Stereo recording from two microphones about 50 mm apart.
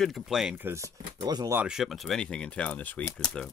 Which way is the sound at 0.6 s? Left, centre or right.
Right.